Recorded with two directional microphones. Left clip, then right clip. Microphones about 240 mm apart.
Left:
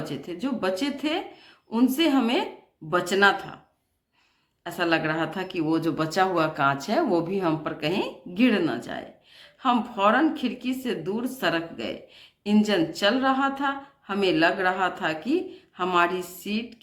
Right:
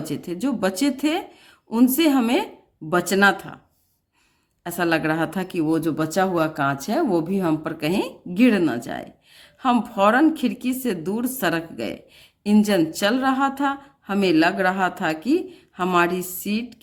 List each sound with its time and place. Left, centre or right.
0.0 s speech: right
4.6 s speech: right